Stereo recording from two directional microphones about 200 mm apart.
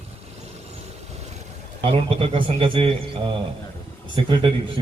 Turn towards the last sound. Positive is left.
turn(degrees=-25)  # may be behind; listen again after turning